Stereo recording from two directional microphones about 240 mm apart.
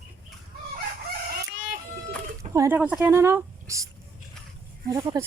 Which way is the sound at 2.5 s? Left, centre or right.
Centre.